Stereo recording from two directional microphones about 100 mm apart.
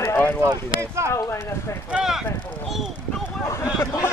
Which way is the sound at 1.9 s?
5° right (ahead or behind).